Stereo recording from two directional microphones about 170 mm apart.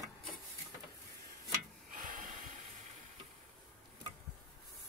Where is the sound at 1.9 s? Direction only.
50° right (ahead or behind).